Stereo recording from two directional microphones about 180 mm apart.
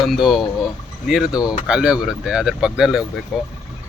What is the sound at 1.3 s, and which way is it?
Speech, 20° left (ahead or behind).